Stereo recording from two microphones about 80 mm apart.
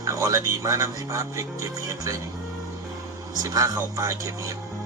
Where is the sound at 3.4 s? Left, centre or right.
Right.